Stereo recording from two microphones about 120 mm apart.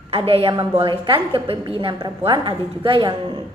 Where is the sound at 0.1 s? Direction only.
50° right (ahead or behind).